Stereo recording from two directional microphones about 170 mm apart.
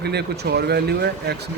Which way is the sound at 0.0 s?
75° right (ahead or behind).